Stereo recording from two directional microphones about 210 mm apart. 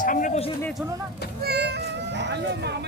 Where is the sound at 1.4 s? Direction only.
50° right (ahead or behind).